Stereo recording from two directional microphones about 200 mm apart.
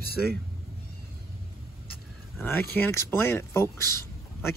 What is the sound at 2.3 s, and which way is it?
Speech, 10° left (ahead or behind).